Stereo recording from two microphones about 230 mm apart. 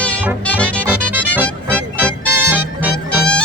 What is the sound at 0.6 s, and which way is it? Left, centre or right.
Music, centre.